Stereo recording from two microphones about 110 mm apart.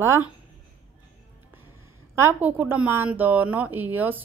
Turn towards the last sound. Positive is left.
turn(degrees=-15)  # may be behind; listen again after turning